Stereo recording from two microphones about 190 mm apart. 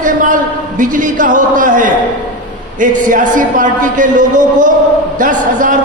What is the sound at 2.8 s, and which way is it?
A man's voice, 45° right (ahead or behind).